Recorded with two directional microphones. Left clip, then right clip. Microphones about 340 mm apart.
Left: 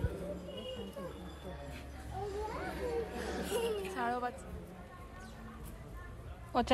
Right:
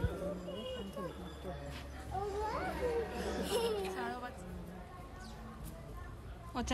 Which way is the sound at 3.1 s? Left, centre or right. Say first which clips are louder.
Right 1 dB; centre.